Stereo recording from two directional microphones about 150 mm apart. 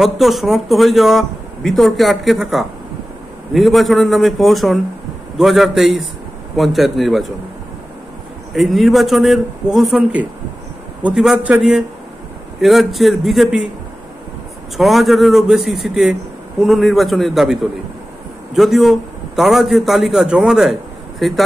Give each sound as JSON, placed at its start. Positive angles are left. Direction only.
{"t": 0.0, "sound": "speech", "side_deg": 0}
{"t": 8.5, "sound": "speech", "side_deg": 0}
{"t": 14.8, "sound": "speech", "side_deg": 0}